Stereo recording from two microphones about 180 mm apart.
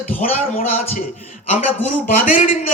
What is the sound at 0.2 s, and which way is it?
A man's voice, 40° left (ahead or behind).